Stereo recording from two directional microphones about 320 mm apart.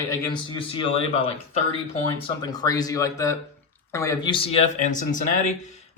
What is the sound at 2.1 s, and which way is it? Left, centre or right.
A man's voice, centre.